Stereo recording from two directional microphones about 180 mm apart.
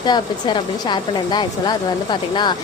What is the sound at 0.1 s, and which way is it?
A woman's voice, 25° left (ahead or behind).